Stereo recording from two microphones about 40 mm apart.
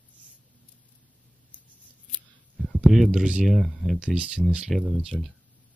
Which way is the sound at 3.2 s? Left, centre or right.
Right.